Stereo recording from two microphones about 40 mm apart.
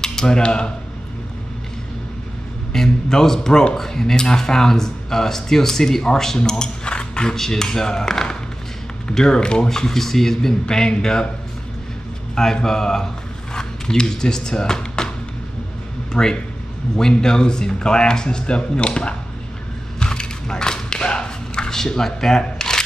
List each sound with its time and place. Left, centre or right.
0.0 s cutlery: centre
2.7 s speech: centre
12.6 s speech: centre
16.1 s speech: centre
20.0 s a sound: left
21.7 s speech: centre